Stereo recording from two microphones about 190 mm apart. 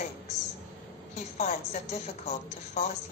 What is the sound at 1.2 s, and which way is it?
A woman's voice, 35° left (ahead or behind).